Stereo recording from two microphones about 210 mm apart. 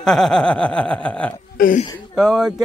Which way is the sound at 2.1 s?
Centre (ahead or behind).